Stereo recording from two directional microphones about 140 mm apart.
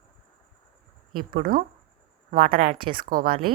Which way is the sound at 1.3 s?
90° right.